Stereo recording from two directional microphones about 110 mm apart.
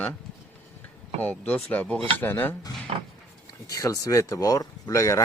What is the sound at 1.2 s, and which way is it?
Speech, 15° left (ahead or behind).